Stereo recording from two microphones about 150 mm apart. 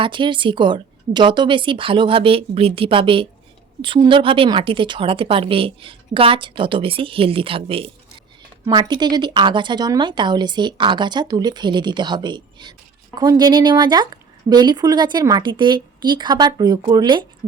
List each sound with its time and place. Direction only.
0.0 s a woman's voice: 35° right (ahead or behind)
8.6 s speech: 25° right (ahead or behind)